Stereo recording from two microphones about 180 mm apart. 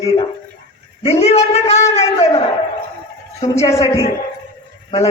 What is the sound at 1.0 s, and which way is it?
Speech, 35° left (ahead or behind).